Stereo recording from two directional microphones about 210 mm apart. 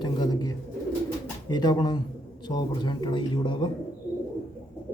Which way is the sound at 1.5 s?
20° left (ahead or behind).